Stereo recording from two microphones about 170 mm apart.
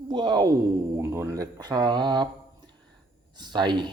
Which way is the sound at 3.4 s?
25° right (ahead or behind).